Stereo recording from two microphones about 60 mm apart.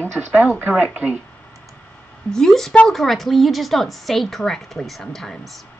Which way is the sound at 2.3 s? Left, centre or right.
Centre.